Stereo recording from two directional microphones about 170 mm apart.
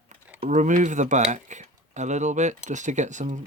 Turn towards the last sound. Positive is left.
turn(degrees=-45)  # may be behind; listen again after turning